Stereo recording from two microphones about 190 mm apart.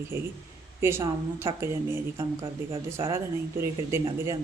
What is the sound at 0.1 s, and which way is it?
Speech, 15° right (ahead or behind).